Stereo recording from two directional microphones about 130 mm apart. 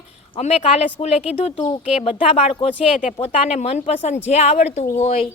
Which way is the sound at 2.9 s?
65° left (ahead or behind).